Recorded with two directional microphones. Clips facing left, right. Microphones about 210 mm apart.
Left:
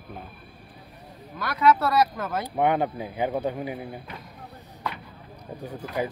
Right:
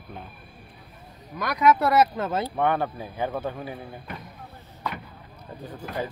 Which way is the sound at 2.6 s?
15° left (ahead or behind).